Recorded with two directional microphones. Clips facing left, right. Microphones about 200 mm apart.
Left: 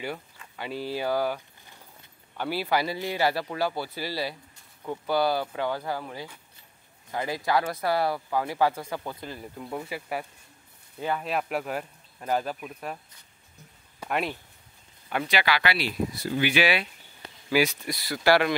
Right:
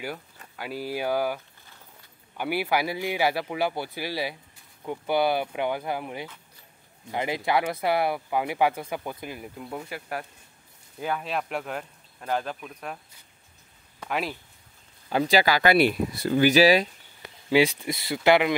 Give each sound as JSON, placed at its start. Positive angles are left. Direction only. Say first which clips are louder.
{"t": 0.6, "sound": "speech", "louder": "even", "side_deg": -5}
{"t": 13.9, "sound": "a sound", "louder": "left 1 dB", "side_deg": 0}
{"t": 15.0, "sound": "speech", "louder": "right 5 dB", "side_deg": -30}
{"t": 16.3, "sound": "speech", "louder": "right 7 dB", "side_deg": -40}
{"t": 17.5, "sound": "speech", "louder": "right 3 dB", "side_deg": -25}